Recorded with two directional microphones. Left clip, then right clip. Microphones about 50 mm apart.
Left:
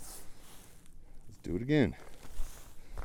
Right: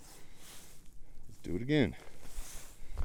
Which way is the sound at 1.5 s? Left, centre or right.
Centre.